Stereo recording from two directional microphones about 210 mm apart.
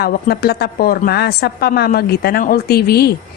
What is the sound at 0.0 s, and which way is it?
A woman's voice, 50° left (ahead or behind).